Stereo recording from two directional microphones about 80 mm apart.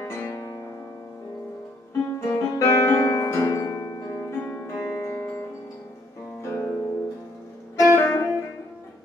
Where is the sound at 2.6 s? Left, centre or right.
Left.